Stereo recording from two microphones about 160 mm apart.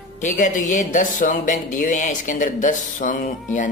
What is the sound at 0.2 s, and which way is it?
Speech, 50° left (ahead or behind).